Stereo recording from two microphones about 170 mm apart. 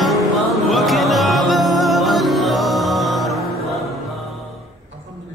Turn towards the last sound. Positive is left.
turn(degrees=0)  # may be behind; listen again after turning